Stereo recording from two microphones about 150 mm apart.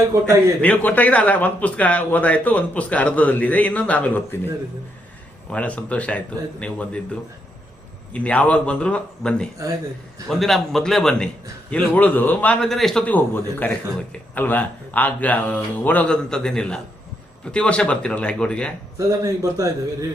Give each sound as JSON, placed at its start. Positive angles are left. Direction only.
{"t": 0.6, "sound": "a man's voice", "side_deg": 10}
{"t": 5.5, "sound": "a man's voice", "side_deg": 10}
{"t": 8.1, "sound": "a man's voice", "side_deg": 10}
{"t": 18.9, "sound": "a man's voice", "side_deg": -20}